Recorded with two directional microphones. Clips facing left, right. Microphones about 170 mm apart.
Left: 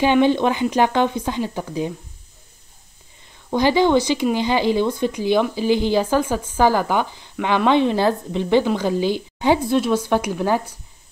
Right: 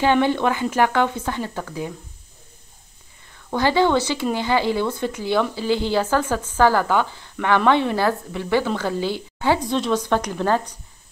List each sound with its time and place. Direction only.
0.0 s speech: 15° left (ahead or behind)
3.4 s speech: 15° left (ahead or behind)